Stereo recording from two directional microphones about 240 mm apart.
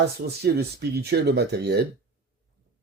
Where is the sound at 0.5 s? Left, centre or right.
Right.